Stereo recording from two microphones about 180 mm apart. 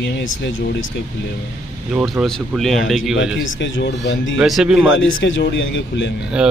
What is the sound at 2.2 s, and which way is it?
Speech, centre (ahead or behind).